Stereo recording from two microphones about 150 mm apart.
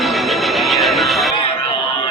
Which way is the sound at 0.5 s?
Centre (ahead or behind).